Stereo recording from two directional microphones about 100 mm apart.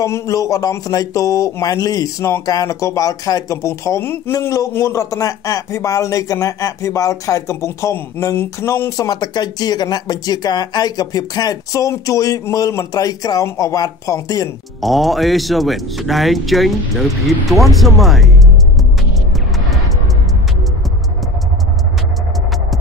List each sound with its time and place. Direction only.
0.0 s speech: 35° left (ahead or behind)
14.8 s speech: centre (ahead or behind)